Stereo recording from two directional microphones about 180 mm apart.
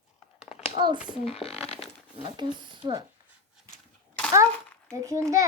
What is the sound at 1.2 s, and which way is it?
Speech, 35° left (ahead or behind).